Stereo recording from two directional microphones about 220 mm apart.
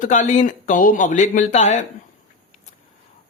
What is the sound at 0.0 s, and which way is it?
A man's voice, 35° left (ahead or behind).